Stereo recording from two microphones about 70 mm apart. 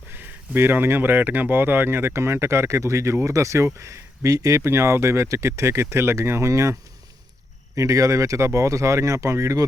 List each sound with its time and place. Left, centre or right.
0.1 s speech: right
7.8 s speech: right